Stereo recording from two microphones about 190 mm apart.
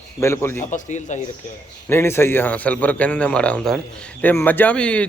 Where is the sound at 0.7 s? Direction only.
40° left (ahead or behind).